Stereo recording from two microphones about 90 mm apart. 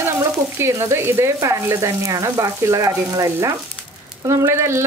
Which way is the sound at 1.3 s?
35° right (ahead or behind).